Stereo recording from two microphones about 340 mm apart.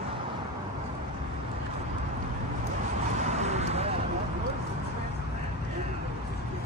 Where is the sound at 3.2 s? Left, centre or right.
Centre.